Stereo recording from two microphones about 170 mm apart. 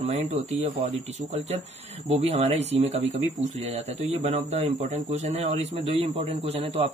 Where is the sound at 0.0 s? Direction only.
40° right (ahead or behind).